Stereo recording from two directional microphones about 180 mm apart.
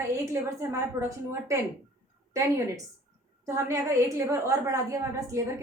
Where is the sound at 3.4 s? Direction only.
15° right (ahead or behind).